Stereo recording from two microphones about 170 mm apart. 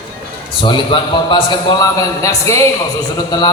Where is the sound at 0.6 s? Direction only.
30° left (ahead or behind).